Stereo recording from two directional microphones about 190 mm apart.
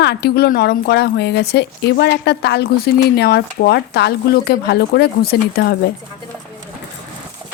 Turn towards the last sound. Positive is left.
turn(degrees=55)  # may be behind; listen again after turning